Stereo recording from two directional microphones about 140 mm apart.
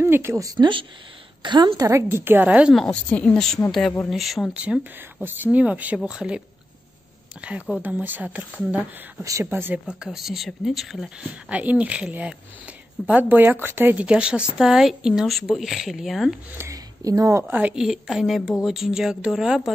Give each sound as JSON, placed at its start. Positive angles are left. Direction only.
{"t": 0.0, "sound": "speech", "side_deg": -20}
{"t": 2.8, "sound": "speech", "side_deg": 10}
{"t": 7.8, "sound": "speech", "side_deg": -10}
{"t": 16.5, "sound": "speech", "side_deg": -25}